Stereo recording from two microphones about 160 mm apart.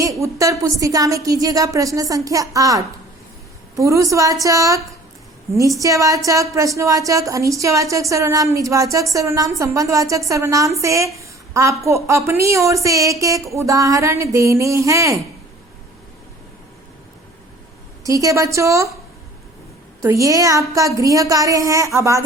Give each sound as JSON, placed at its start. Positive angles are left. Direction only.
{"t": 0.0, "sound": "a woman's voice", "side_deg": -20}
{"t": 18.0, "sound": "a woman's voice", "side_deg": -20}
{"t": 20.0, "sound": "a woman's voice", "side_deg": -20}